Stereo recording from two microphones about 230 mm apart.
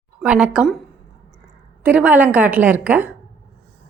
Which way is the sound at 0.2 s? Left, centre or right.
Centre.